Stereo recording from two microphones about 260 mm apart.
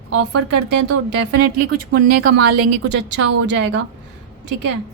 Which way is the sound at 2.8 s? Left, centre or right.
Right.